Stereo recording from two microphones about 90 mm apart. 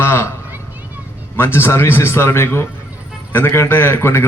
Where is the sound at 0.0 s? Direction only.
25° left (ahead or behind).